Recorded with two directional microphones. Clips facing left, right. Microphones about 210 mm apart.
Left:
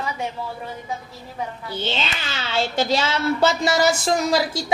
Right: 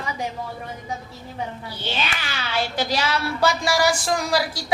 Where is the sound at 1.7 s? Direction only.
25° left (ahead or behind).